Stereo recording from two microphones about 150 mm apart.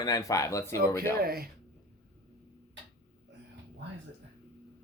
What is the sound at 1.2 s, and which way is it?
Speech, 90° right.